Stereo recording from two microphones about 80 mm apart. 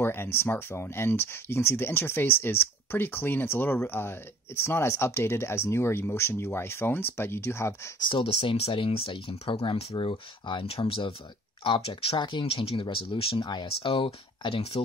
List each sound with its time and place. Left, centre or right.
0.0 s speech: left
8.0 s speech: left
14.4 s speech: left